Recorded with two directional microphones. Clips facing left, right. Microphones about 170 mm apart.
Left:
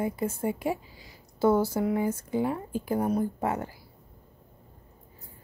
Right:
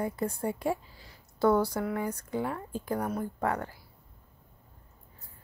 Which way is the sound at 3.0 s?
15° left (ahead or behind).